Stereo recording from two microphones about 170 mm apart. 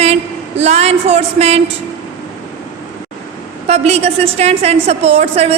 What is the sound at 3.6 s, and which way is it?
A woman's voice, 40° right (ahead or behind).